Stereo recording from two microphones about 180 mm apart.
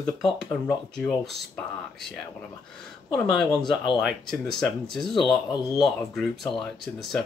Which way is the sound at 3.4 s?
25° left (ahead or behind).